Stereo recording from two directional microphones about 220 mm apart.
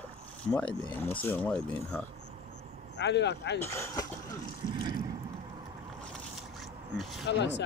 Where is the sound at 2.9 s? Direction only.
50° left (ahead or behind).